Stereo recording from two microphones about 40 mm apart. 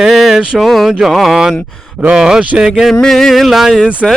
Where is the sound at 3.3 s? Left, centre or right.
Centre.